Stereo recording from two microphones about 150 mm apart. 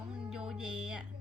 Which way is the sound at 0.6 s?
5° right (ahead or behind).